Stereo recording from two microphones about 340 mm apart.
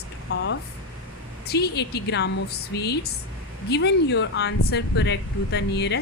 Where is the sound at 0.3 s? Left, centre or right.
Left.